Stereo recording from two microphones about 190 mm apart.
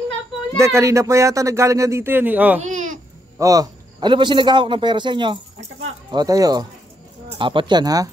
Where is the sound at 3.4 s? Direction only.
20° right (ahead or behind).